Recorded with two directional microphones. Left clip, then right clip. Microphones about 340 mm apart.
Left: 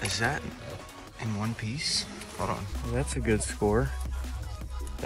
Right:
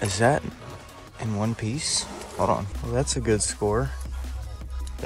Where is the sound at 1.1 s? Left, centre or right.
Centre.